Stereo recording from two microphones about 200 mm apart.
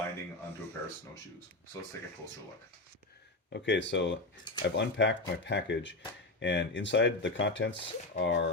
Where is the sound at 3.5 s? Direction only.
60° left (ahead or behind).